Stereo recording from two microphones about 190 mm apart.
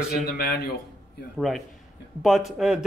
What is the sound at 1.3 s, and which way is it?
Speech, centre (ahead or behind).